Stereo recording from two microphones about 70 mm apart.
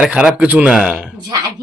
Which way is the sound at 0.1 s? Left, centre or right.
Centre.